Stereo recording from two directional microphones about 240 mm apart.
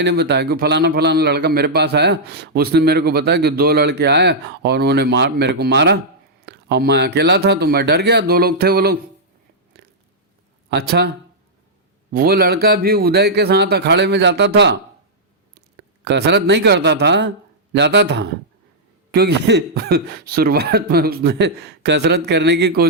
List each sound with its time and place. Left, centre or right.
0.0 s speech: right
10.7 s speech: right
12.1 s speech: right
16.0 s speech: right